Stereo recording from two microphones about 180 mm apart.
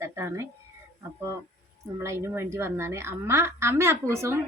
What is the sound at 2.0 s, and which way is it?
A woman's voice, 15° right (ahead or behind).